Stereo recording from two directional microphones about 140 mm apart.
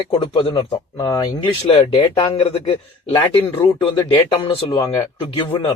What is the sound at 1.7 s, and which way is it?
Speech, 40° left (ahead or behind).